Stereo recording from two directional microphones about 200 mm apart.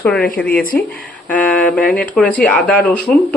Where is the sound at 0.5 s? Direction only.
45° left (ahead or behind).